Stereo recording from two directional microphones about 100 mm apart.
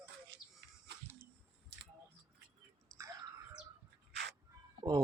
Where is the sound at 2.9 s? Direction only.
35° right (ahead or behind).